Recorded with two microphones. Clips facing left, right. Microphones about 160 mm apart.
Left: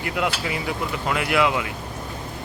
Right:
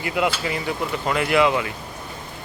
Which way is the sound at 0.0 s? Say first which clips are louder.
Right 2 dB; centre (ahead or behind).